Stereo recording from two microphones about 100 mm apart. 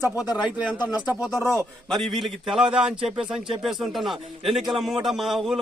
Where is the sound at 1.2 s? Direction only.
Centre (ahead or behind).